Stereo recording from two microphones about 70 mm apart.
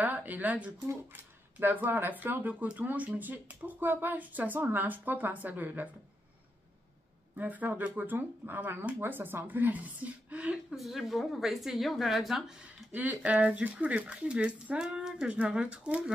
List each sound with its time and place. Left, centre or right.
0.0 s speech: right
0.8 s speech: right
7.3 s speech: right
10.7 s a woman's voice: centre
12.9 s speech: right